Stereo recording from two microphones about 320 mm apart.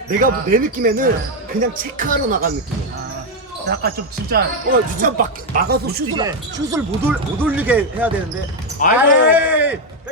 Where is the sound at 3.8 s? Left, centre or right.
Right.